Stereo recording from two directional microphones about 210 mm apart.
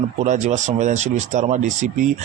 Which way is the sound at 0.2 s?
35° right (ahead or behind).